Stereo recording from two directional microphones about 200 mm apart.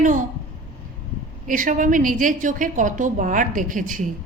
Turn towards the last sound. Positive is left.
turn(degrees=-40)  # may be behind; listen again after turning